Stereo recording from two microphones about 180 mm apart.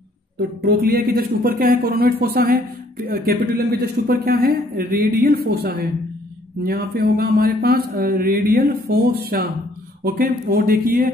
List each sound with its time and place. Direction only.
0.4 s speech: 60° right (ahead or behind)